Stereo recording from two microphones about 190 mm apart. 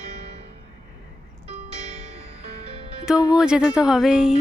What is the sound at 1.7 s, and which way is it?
Music, 30° right (ahead or behind).